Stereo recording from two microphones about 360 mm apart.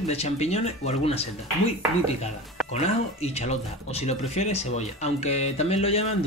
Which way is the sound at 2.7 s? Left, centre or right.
Centre.